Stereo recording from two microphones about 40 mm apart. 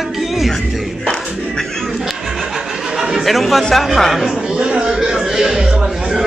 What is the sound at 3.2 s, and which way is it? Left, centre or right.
Speech, centre.